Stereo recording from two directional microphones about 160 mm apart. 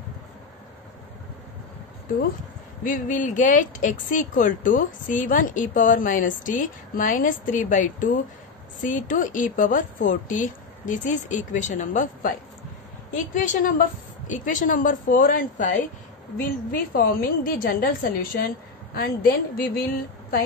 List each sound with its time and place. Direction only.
2.8 s a woman's voice: 55° left (ahead or behind)
16.7 s a woman's voice: 65° left (ahead or behind)